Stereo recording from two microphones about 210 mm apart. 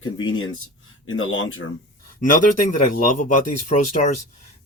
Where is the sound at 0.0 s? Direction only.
75° left (ahead or behind).